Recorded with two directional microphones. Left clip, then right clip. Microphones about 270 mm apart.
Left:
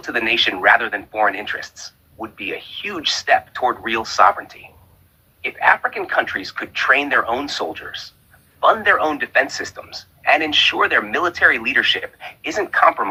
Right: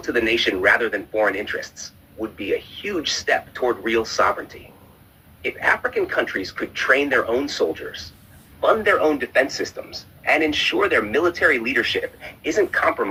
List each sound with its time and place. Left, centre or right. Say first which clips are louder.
0.0 s a man's voice: left 2 dB; centre